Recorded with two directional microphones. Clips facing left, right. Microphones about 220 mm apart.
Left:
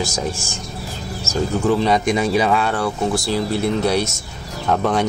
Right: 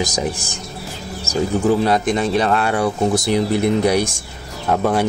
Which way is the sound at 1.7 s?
5° right (ahead or behind).